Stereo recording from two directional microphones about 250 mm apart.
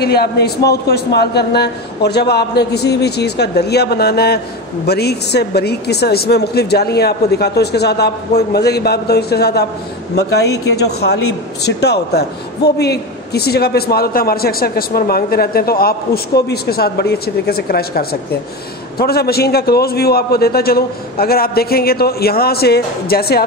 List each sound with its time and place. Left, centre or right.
0.0 s speech: left